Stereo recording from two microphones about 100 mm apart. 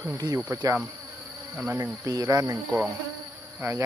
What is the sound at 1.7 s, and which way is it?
Speech, 35° right (ahead or behind).